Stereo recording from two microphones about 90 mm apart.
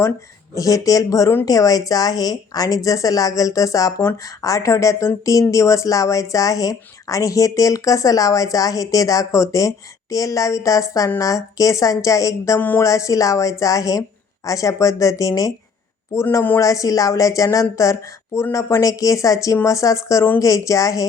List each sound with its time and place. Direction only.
0.5 s a woman's voice: 40° left (ahead or behind)
12.5 s speech: 20° left (ahead or behind)
12.8 s a woman's voice: 35° left (ahead or behind)
16.1 s speech: 25° left (ahead or behind)
16.6 s a woman's voice: 40° left (ahead or behind)